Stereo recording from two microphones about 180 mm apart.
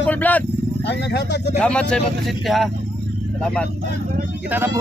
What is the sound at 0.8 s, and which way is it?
Speech, 70° left (ahead or behind).